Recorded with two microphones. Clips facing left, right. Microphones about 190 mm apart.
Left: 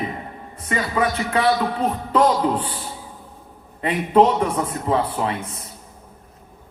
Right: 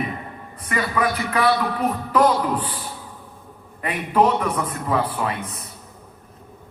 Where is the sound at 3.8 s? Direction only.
25° left (ahead or behind).